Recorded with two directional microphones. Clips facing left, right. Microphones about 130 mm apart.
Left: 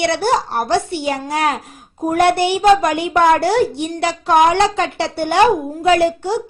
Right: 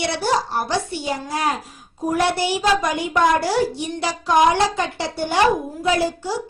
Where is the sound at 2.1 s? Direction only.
60° left (ahead or behind).